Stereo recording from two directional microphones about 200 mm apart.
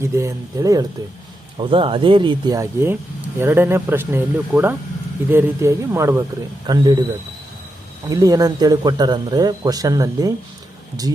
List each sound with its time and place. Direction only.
0.0 s speech: 15° right (ahead or behind)
8.1 s speech: 20° right (ahead or behind)